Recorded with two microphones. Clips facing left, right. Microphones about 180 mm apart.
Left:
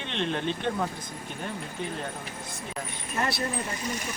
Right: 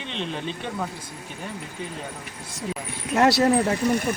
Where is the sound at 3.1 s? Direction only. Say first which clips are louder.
Right 12 dB; 85° right; by 4.1 s 60° right (ahead or behind).